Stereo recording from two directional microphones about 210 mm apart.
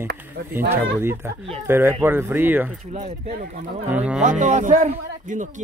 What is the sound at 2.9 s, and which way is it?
Speech, 35° right (ahead or behind).